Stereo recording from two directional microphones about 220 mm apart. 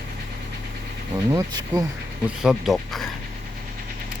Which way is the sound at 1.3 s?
15° right (ahead or behind).